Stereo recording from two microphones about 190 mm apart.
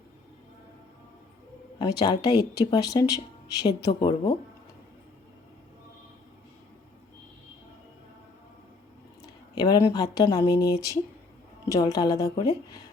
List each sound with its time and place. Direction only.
1.8 s speech: 20° left (ahead or behind)
9.2 s speech: 20° left (ahead or behind)